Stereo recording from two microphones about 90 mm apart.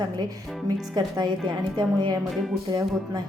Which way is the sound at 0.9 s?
50° right (ahead or behind).